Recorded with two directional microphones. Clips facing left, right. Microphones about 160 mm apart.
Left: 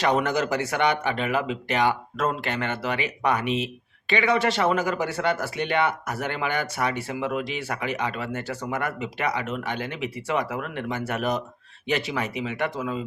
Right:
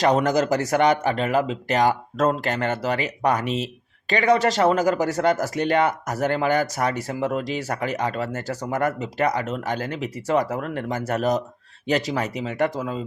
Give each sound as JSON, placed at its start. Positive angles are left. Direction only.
{"t": 0.0, "sound": "speech", "side_deg": -40}